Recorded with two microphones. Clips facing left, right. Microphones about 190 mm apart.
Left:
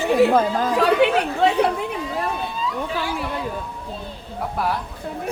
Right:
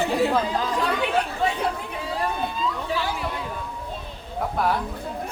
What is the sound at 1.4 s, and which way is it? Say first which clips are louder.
Speech: left 9 dB; 75° left (ahead or behind).